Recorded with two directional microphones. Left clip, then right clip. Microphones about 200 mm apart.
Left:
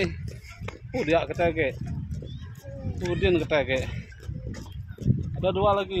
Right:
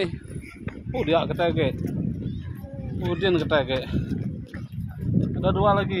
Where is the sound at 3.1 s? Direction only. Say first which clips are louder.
Right 1 dB; 25° right (ahead or behind).